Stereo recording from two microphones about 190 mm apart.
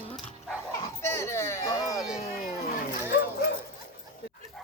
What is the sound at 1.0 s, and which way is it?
Music, 15° left (ahead or behind).